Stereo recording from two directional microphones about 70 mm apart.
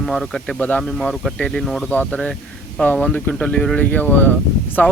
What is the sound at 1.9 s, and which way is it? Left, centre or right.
Speech, centre.